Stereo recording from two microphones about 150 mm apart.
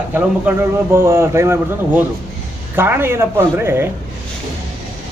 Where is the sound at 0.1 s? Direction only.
15° right (ahead or behind).